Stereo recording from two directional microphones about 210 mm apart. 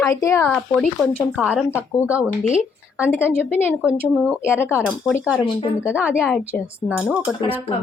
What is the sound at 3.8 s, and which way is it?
Speech, 5° right (ahead or behind).